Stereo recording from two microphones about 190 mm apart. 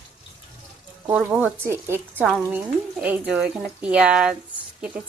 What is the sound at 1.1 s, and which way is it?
Speech, 10° right (ahead or behind).